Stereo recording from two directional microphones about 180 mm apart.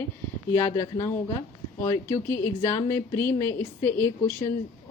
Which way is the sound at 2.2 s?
15° left (ahead or behind).